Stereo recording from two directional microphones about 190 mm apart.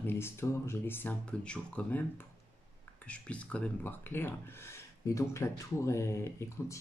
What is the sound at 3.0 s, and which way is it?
Speech, 5° left (ahead or behind).